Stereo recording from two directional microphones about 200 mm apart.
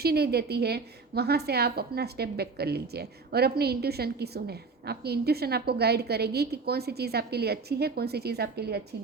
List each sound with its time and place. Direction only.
0.0 s a woman's voice: 50° right (ahead or behind)